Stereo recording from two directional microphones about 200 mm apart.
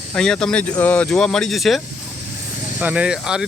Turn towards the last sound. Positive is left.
turn(degrees=-5)  # may be behind; listen again after turning